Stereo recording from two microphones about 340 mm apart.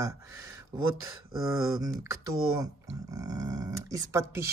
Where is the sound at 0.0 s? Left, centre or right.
Centre.